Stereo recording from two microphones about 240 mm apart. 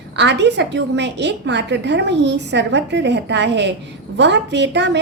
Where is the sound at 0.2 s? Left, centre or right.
Right.